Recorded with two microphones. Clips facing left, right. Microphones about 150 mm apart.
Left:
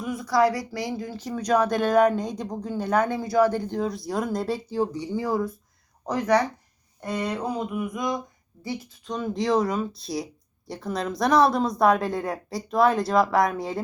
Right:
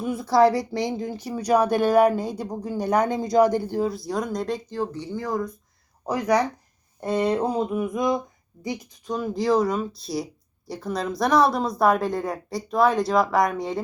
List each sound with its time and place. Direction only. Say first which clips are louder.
0.0 s a sound: right 3 dB; 30° right (ahead or behind)
0.7 s speech: right 4 dB; 20° right (ahead or behind); by 5.5 s 5° left (ahead or behind)
6.1 s speech: even; 10° right (ahead or behind)
7.0 s a sound: right 6 dB; 25° right (ahead or behind)
8.6 s speech: right 2 dB; 15° right (ahead or behind)
9.1 s a woman's voice: right 2 dB; centre (ahead or behind)